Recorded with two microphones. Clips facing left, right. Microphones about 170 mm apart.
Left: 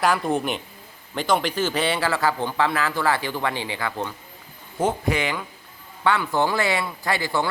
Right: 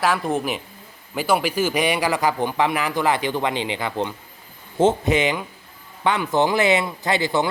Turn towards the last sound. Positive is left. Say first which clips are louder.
# right 3 dB
turn(degrees=-20)  # may be behind; listen again after turning